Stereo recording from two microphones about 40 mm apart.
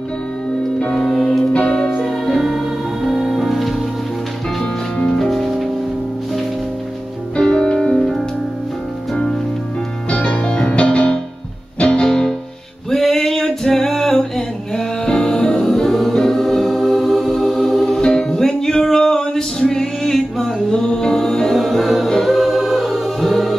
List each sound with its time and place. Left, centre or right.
1.1 s music: centre
1.4 s music: left
3.1 s music: centre
5.0 s music: centre
5.3 s music: centre
7.3 s music: centre
10.1 s music: left
12.9 s music: centre
15.6 s music: centre
18.0 s music: centre
20.7 s music: centre
22.2 s choir: centre